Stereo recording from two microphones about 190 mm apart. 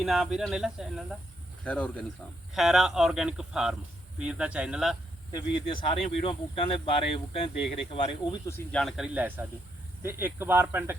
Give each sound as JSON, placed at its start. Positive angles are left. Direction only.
{"t": 0.0, "sound": "speech", "side_deg": 0}
{"t": 5.3, "sound": "speech", "side_deg": 25}
{"t": 8.4, "sound": "speech", "side_deg": 15}
{"t": 8.8, "sound": "speech", "side_deg": 0}